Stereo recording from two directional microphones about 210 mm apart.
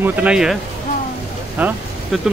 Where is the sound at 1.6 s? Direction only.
10° right (ahead or behind).